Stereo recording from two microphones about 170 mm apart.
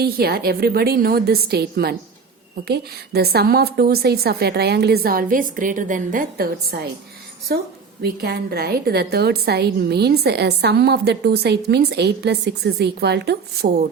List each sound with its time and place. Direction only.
0.0 s a woman's voice: 65° right (ahead or behind)
8.0 s a woman's voice: 65° right (ahead or behind)